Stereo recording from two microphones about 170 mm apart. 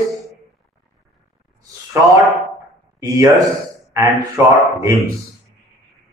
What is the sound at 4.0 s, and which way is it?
Speech, 20° right (ahead or behind).